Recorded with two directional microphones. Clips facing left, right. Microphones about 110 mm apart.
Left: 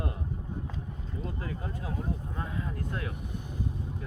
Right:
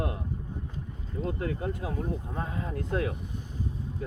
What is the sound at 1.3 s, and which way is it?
Speech, 65° right (ahead or behind).